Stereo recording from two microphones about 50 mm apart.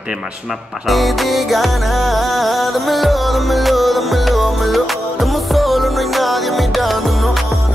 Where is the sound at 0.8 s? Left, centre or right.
Centre.